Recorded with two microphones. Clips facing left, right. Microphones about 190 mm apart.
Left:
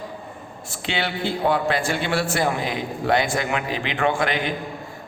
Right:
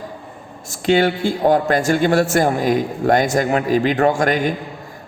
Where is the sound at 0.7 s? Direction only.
45° right (ahead or behind).